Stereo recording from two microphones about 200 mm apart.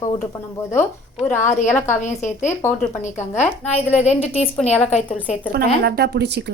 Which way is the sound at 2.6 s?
10° left (ahead or behind).